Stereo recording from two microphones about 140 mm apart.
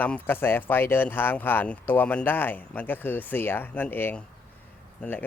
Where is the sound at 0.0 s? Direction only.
10° left (ahead or behind).